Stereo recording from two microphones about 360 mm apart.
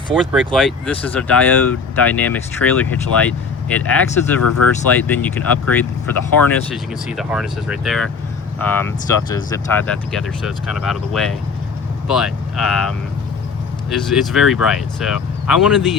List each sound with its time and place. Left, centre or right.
0.1 s speech: centre
4.4 s speech: left
4.9 s speech: centre
13.9 s speech: centre